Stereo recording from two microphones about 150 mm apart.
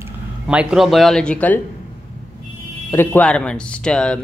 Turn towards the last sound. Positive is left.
turn(degrees=5)  # may be behind; listen again after turning